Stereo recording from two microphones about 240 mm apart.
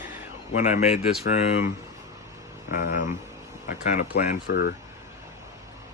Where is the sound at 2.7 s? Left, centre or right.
Left.